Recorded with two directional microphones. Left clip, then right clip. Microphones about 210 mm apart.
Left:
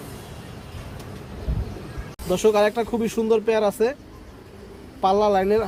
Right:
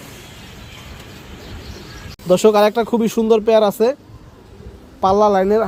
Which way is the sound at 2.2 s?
40° right (ahead or behind).